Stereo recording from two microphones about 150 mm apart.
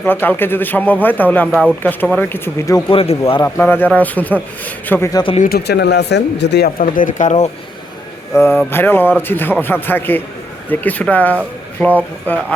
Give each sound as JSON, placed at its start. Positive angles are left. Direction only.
{"t": 0.0, "sound": "a man's voice", "side_deg": 10}
{"t": 2.9, "sound": "a man's voice", "side_deg": 40}
{"t": 3.4, "sound": "a man's voice", "side_deg": 15}
{"t": 5.4, "sound": "speech", "side_deg": 90}
{"t": 8.3, "sound": "a man's voice", "side_deg": 15}